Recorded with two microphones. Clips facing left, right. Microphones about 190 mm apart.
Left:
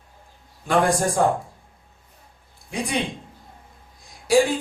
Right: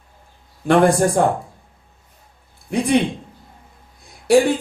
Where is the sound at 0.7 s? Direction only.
60° right (ahead or behind).